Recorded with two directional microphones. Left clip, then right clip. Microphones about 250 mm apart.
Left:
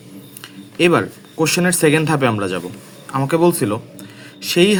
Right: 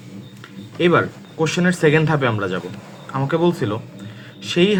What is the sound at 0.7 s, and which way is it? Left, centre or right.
Speech, left.